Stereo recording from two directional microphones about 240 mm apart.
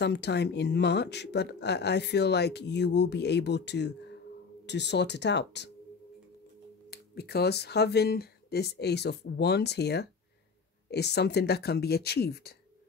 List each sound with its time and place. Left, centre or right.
0.0 s speech: left
6.9 s speech: left